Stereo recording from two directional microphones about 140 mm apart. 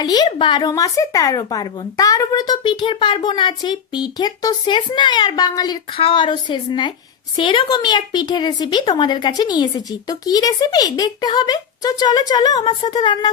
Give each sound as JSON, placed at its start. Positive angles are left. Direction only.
{"t": 0.0, "sound": "speech", "side_deg": 30}
{"t": 6.0, "sound": "a woman's voice", "side_deg": 40}